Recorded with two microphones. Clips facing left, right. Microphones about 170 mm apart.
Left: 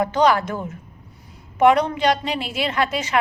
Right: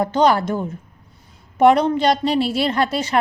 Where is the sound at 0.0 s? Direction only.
30° right (ahead or behind).